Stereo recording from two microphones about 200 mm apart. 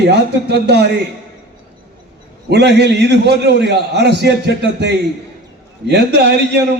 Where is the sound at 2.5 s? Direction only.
55° right (ahead or behind).